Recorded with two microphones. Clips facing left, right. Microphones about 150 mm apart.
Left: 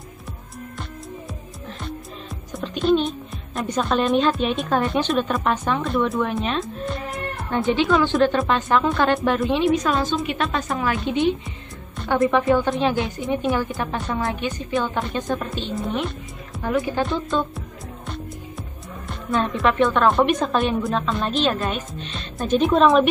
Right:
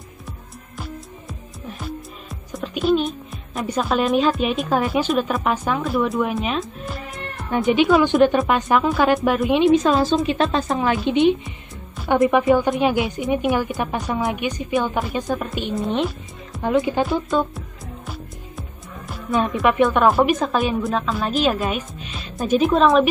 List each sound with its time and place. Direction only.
1.7 s a woman's voice: 5° right (ahead or behind)
9.6 s a woman's voice: 25° right (ahead or behind); by 15.4 s 5° right (ahead or behind)
16.6 s a woman's voice: 20° right (ahead or behind)
17.0 s music: 5° right (ahead or behind)
18.6 s a woman's voice: 5° right (ahead or behind)